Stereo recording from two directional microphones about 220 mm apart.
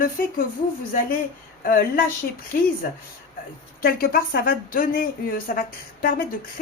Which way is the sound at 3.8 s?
40° left (ahead or behind).